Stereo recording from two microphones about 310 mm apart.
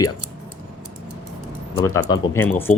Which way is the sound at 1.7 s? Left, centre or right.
Centre.